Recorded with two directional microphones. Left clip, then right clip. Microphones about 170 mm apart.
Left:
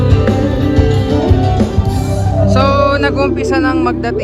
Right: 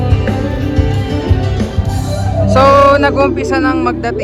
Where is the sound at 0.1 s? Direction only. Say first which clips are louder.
Left 3 dB; 60° left (ahead or behind).